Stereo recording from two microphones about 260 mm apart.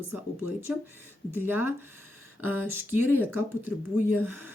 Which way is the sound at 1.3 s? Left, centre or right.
Centre.